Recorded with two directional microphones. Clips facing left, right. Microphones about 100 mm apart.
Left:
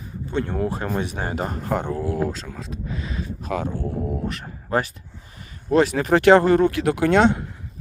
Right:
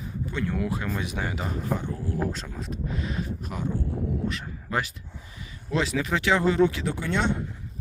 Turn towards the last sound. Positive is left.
turn(degrees=90)